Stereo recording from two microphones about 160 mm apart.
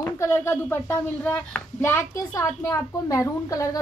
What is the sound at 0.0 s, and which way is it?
Speech, 15° left (ahead or behind).